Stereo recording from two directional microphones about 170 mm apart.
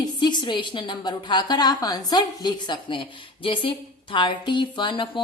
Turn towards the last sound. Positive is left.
turn(degrees=30)  # may be behind; listen again after turning